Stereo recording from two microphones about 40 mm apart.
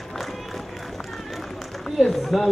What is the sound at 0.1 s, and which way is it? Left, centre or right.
A man's voice, centre.